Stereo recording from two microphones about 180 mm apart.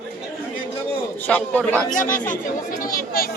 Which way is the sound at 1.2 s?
10° left (ahead or behind).